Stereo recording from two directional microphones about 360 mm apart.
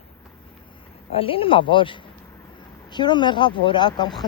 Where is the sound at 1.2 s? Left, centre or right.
Centre.